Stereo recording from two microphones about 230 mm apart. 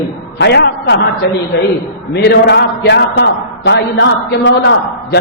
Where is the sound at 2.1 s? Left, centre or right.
Left.